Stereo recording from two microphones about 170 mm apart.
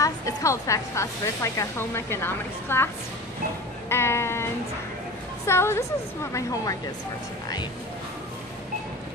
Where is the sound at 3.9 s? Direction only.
15° left (ahead or behind).